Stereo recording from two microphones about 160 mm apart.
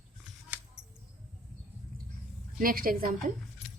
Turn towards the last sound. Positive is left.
turn(degrees=-60)  # may be behind; listen again after turning